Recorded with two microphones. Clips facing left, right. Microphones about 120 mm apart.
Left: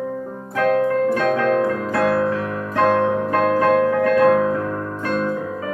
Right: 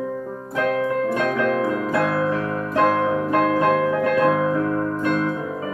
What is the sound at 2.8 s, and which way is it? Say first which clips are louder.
Music: left 3 dB; 40° left (ahead or behind).